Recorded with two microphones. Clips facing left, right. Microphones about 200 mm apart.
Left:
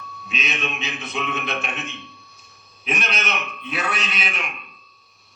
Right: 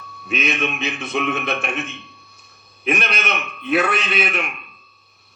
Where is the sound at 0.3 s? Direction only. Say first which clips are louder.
Right 6 dB; 55° right (ahead or behind).